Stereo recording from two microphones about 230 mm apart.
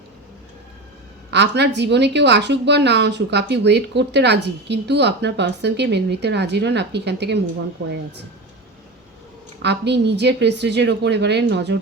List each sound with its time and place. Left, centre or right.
1.3 s a woman's voice: right
9.6 s a woman's voice: right